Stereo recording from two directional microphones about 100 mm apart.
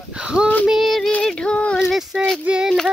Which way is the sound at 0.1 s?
10° right (ahead or behind).